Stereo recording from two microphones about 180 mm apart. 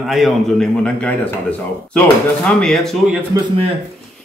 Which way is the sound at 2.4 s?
5° left (ahead or behind).